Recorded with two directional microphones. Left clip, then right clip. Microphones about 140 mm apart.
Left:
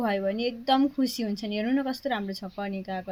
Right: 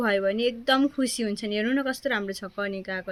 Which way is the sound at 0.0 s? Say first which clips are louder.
Right 4 dB; 25° right (ahead or behind).